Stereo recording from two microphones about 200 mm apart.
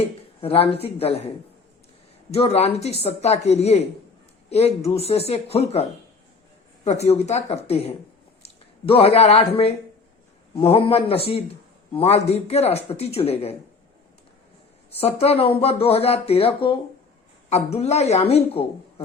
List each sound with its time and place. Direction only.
0.0 s speech: 30° left (ahead or behind)
2.3 s speech: 30° left (ahead or behind)
6.8 s speech: 35° left (ahead or behind)
14.9 s speech: 30° left (ahead or behind)